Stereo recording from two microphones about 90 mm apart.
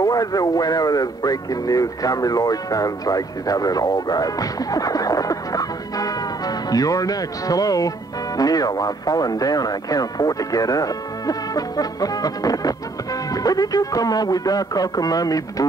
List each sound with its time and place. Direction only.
0.0 s speech: 40° left (ahead or behind)